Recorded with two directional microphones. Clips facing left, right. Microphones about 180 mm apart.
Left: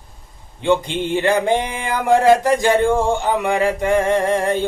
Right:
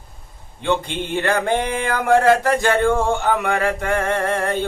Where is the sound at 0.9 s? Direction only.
55° right (ahead or behind).